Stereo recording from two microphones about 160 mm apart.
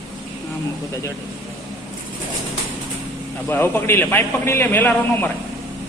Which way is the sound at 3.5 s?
10° left (ahead or behind).